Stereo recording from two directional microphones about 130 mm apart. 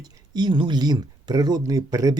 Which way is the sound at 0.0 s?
35° right (ahead or behind).